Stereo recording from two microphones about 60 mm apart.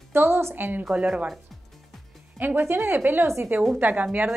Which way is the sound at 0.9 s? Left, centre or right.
Centre.